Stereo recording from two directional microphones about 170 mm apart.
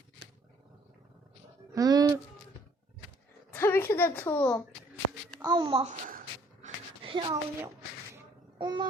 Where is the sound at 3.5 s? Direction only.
15° left (ahead or behind).